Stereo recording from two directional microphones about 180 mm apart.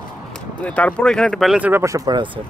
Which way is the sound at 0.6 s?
5° left (ahead or behind).